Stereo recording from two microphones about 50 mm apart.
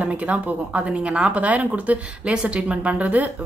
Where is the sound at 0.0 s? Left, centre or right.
Right.